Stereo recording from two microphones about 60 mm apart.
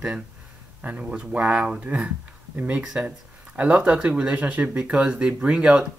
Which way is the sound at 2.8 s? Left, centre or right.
Centre.